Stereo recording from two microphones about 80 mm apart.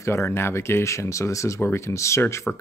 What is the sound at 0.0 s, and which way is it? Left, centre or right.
Speech, left.